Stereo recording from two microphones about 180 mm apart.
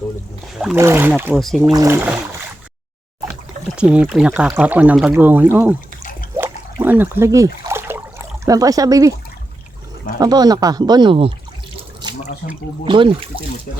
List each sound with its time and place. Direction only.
0.8 s speech: 15° right (ahead or behind)
1.4 s speech: centre (ahead or behind)
1.7 s speech: 15° right (ahead or behind)
3.8 s speech: 5° right (ahead or behind)
6.3 s a sound: 15° right (ahead or behind)
10.2 s speech: 20° right (ahead or behind)
12.0 s water: 25° right (ahead or behind)
12.8 s speech: 30° right (ahead or behind)